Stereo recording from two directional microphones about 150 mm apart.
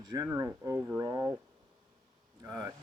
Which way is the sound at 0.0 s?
25° right (ahead or behind).